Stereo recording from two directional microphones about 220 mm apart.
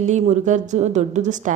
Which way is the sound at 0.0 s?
35° right (ahead or behind).